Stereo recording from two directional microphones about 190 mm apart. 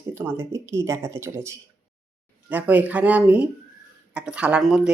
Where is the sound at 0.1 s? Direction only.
10° right (ahead or behind).